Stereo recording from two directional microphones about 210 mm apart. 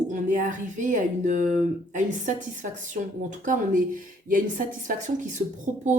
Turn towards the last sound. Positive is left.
turn(degrees=-35)  # may be behind; listen again after turning